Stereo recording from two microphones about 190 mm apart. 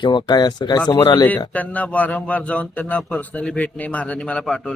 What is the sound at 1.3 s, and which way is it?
Speech, 10° left (ahead or behind).